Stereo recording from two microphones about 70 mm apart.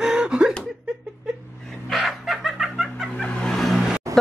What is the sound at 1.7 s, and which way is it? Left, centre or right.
Chicken, centre.